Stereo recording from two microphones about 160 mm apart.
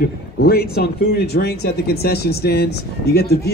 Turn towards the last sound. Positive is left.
turn(degrees=80)